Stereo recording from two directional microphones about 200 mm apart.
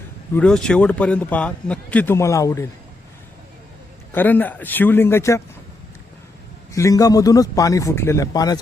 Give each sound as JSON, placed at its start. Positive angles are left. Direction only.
{"t": 0.3, "sound": "a man's voice", "side_deg": 5}
{"t": 4.1, "sound": "a man's voice", "side_deg": 10}
{"t": 6.7, "sound": "a man's voice", "side_deg": 15}